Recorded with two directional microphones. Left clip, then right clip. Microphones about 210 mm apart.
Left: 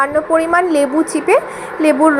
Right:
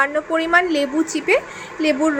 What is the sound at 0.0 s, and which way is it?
A woman's voice, 10° left (ahead or behind).